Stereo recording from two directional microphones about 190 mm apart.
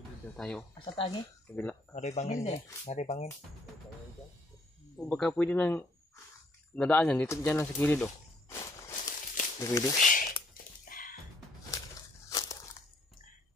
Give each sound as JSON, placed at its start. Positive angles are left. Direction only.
{"t": 0.4, "sound": "speech", "side_deg": 5}
{"t": 0.7, "sound": "speech", "side_deg": 25}
{"t": 1.5, "sound": "speech", "side_deg": 5}
{"t": 2.0, "sound": "speech", "side_deg": 35}
{"t": 4.9, "sound": "speech", "side_deg": 0}
{"t": 9.9, "sound": "a sound", "side_deg": 45}
{"t": 10.9, "sound": "music", "side_deg": 45}
{"t": 12.3, "sound": "crumpling", "side_deg": 20}